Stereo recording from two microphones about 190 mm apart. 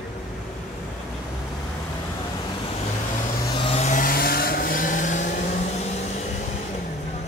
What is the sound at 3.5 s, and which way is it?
Vehicle, 30° left (ahead or behind).